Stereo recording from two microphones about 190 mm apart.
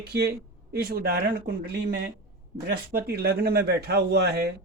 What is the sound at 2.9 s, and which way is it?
Speech, 55° right (ahead or behind).